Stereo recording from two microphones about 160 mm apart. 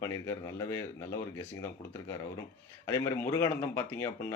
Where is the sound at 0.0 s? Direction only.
20° left (ahead or behind).